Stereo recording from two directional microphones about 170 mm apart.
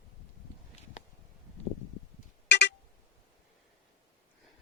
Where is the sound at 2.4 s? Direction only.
90° left.